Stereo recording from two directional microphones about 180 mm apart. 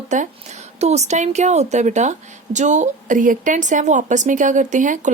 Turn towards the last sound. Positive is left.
turn(degrees=-45)  # may be behind; listen again after turning